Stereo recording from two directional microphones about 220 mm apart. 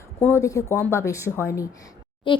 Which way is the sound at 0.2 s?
10° left (ahead or behind).